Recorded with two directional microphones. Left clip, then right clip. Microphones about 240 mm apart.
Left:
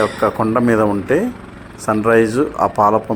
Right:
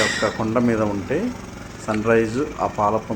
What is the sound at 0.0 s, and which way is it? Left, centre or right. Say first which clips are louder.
A man's voice: left 5 dB; centre.